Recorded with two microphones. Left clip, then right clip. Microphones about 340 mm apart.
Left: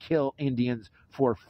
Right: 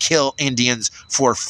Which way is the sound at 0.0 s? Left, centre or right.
Left.